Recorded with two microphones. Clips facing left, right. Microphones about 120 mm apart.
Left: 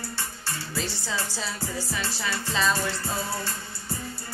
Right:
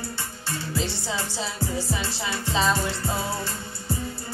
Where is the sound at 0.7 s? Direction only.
20° right (ahead or behind).